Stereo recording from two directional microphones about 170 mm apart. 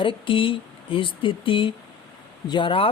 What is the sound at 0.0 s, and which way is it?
Speech, 30° left (ahead or behind).